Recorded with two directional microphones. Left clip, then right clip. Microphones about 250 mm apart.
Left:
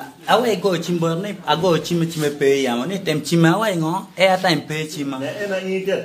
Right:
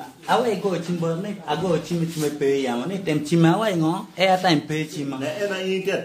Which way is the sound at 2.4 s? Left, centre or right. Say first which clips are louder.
Left 5 dB; centre.